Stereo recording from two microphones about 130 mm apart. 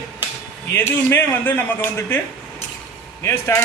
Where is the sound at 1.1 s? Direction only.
15° left (ahead or behind).